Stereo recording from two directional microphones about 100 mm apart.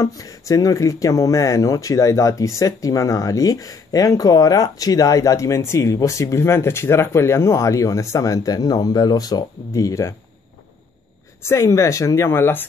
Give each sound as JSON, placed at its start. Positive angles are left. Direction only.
{"t": 0.0, "sound": "speech", "side_deg": 35}
{"t": 11.4, "sound": "speech", "side_deg": 30}